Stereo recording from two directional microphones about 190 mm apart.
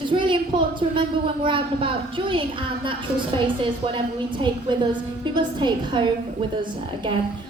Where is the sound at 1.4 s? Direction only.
25° right (ahead or behind).